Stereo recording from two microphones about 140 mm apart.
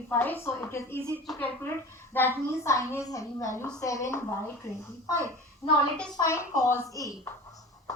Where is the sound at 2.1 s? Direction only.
15° left (ahead or behind).